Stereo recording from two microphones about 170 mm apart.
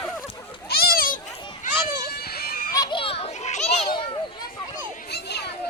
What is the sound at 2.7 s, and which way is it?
Children playing, 25° left (ahead or behind).